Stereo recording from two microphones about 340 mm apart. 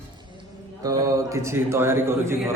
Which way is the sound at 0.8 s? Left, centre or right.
Centre.